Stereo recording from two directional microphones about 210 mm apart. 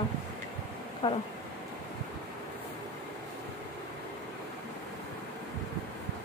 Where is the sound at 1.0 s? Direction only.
25° left (ahead or behind).